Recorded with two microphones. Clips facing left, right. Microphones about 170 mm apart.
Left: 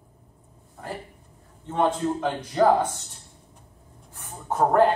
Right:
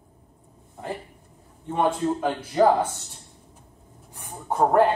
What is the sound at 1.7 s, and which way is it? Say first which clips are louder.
Speech: even; 5° right (ahead or behind).